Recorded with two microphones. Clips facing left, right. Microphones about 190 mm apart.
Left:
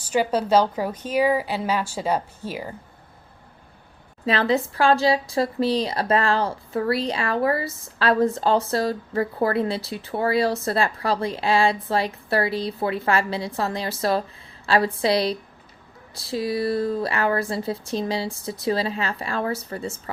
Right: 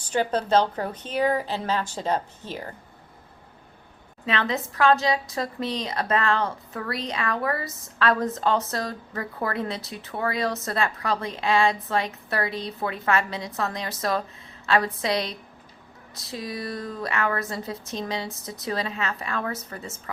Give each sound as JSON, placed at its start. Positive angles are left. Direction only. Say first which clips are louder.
{"t": 0.0, "sound": "a woman's voice", "louder": "left 3 dB", "side_deg": 10}
{"t": 4.3, "sound": "a woman's voice", "louder": "left 6 dB", "side_deg": 35}